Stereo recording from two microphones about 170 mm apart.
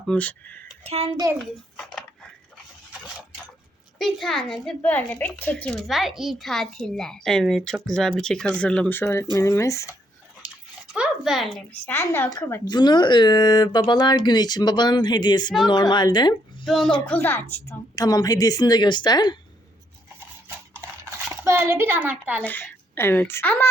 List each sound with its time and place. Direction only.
0.1 s speech: 10° left (ahead or behind)
0.9 s a child's voice: 35° right (ahead or behind)
1.1 s a child's voice: 20° right (ahead or behind)
1.7 s cutlery: 5° left (ahead or behind)
3.9 s a woman's voice: centre (ahead or behind); by 9.8 s 15° left (ahead or behind)
10.4 s dog: 5° right (ahead or behind)
10.9 s speech: 5° right (ahead or behind); by 12.6 s 15° left (ahead or behind)
12.6 s speech: 25° left (ahead or behind)
16.6 s a woman's voice: centre (ahead or behind); by 19.4 s 25° left (ahead or behind)
21.4 s a woman's voice: 15° right (ahead or behind)
22.4 s a woman's voice: 10° left (ahead or behind)